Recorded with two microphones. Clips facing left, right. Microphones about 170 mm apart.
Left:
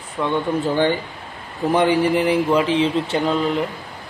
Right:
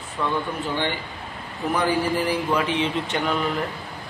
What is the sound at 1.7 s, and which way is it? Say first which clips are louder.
Speech: left 6 dB; 25° left (ahead or behind).